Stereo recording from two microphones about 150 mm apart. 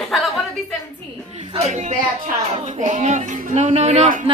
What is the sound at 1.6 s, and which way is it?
Speech, 50° right (ahead or behind).